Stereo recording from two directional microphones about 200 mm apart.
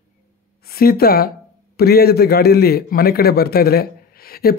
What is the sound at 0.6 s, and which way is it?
Speech, 50° left (ahead or behind).